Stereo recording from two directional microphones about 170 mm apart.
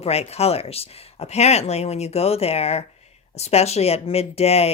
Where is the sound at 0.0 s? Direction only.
40° left (ahead or behind).